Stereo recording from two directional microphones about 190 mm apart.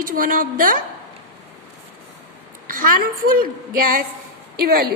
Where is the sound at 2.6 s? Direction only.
45° right (ahead or behind).